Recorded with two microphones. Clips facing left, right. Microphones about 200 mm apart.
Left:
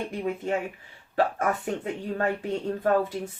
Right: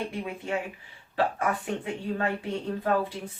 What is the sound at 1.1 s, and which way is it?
Speech, 45° left (ahead or behind).